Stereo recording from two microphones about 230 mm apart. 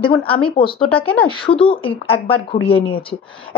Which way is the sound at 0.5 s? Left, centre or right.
Left.